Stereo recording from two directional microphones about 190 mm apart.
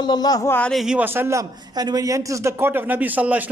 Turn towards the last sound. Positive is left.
turn(degrees=-10)  # may be behind; listen again after turning